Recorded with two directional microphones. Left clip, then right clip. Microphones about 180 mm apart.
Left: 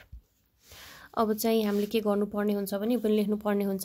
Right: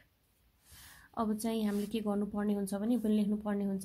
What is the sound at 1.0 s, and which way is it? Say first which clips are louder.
Speech: left 9 dB; 35° left (ahead or behind).